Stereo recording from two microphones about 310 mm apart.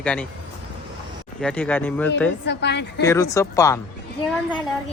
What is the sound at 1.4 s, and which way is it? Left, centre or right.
Speech, centre.